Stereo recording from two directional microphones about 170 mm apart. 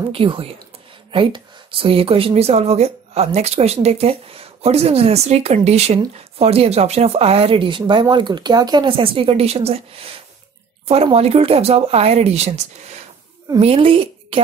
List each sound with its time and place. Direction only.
0.1 s a woman's voice: 30° right (ahead or behind)